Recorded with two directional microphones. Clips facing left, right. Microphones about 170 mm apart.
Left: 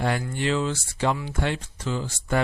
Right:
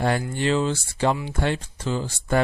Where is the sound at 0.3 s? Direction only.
30° right (ahead or behind).